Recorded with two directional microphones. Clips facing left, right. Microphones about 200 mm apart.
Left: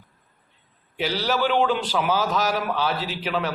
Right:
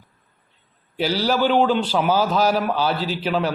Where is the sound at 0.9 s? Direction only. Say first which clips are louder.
Right 4 dB; 35° right (ahead or behind).